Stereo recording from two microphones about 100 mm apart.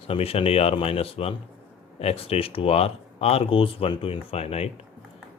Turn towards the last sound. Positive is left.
turn(degrees=90)